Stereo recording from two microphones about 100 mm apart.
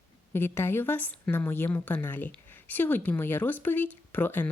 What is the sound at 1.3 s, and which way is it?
Speech, 20° left (ahead or behind).